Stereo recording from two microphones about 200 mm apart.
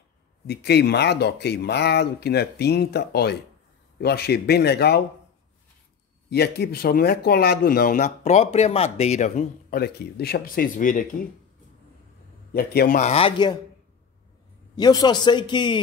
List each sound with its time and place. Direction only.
0.5 s speech: 55° left (ahead or behind)
6.3 s speech: 55° left (ahead or behind)
12.5 s speech: 45° left (ahead or behind)
13.1 s a man's voice: 25° left (ahead or behind)
14.8 s a man's voice: 20° left (ahead or behind)